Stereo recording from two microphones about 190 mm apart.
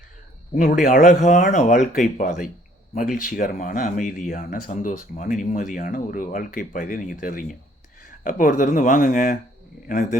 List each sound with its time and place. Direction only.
0.5 s speech: 40° left (ahead or behind)